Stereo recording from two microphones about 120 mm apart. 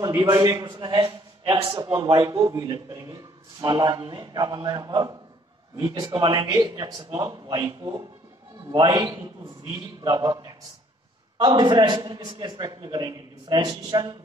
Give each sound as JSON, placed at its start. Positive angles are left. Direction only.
{"t": 0.0, "sound": "a man's voice", "side_deg": -35}